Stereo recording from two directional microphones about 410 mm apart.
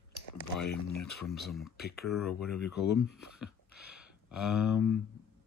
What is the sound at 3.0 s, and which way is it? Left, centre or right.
Speech, left.